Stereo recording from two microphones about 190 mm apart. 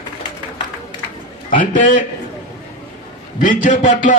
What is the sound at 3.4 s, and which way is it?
Speech, 45° left (ahead or behind).